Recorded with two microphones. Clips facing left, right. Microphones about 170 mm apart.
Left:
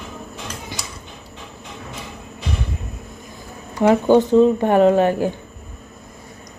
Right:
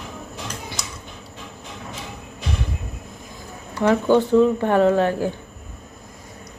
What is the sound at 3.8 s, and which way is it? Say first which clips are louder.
Speech: left 3 dB; 20° left (ahead or behind).